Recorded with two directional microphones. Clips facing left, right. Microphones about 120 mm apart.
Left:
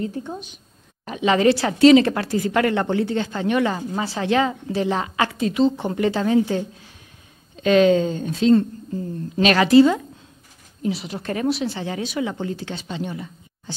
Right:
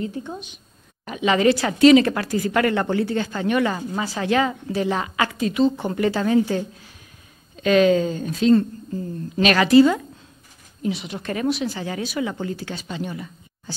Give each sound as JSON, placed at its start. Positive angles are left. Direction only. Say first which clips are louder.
{"t": 0.0, "sound": "a woman's voice", "louder": "left 1 dB", "side_deg": 40}